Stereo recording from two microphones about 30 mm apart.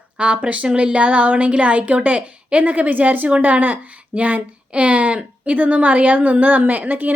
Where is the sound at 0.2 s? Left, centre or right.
Right.